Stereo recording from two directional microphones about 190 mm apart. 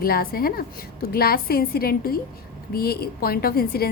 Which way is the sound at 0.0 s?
50° left (ahead or behind).